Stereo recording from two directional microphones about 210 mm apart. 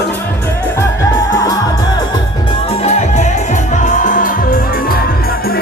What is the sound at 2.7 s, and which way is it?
Music, 30° left (ahead or behind).